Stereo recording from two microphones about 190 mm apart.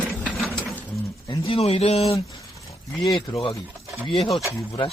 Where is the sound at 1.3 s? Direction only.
30° left (ahead or behind).